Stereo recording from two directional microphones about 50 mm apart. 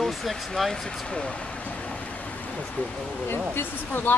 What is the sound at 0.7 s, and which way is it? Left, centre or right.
Speech, centre.